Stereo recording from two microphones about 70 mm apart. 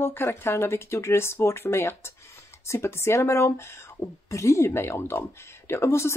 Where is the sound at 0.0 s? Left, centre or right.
Left.